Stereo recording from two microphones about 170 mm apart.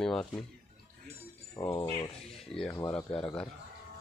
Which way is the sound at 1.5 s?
25° left (ahead or behind).